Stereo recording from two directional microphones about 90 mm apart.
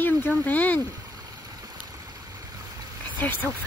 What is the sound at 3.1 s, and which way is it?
Speech, 20° left (ahead or behind).